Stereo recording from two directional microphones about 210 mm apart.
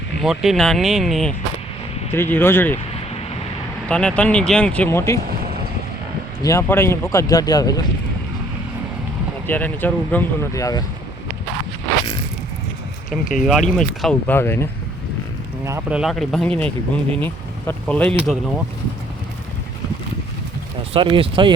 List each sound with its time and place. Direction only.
0.2 s speech: centre (ahead or behind)
3.8 s speech: 5° left (ahead or behind)
6.4 s speech: 15° left (ahead or behind)
9.5 s speech: 10° left (ahead or behind)
13.4 s speech: centre (ahead or behind)
15.6 s speech: 10° right (ahead or behind)
20.9 s speech: 25° right (ahead or behind)